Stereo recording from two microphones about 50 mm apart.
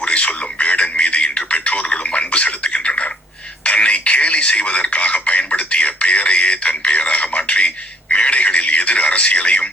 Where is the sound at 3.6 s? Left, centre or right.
Left.